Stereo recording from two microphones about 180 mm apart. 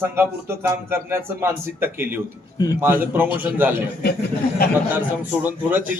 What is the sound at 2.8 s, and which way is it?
Speech, 10° right (ahead or behind).